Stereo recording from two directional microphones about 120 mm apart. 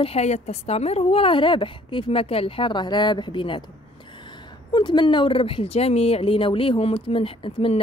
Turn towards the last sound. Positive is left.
turn(degrees=50)  # may be behind; listen again after turning